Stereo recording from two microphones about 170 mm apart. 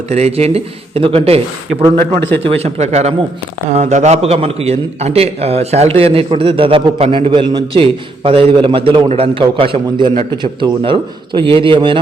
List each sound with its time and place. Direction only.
0.1 s a man's voice: 40° right (ahead or behind)
2.5 s a man's voice: 35° right (ahead or behind)